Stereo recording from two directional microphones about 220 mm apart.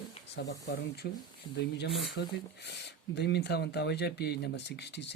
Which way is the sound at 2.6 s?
50° left (ahead or behind).